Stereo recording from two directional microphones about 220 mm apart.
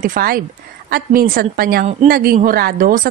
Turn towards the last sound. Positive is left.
turn(degrees=-40)  # may be behind; listen again after turning